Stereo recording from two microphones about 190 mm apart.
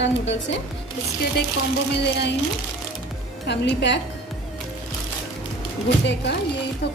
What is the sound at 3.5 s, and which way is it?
Speech, 65° left (ahead or behind).